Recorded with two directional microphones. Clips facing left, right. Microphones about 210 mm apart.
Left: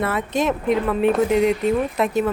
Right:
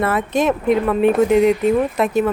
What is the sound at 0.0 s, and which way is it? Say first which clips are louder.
Speech: right 3 dB; 55° right (ahead or behind).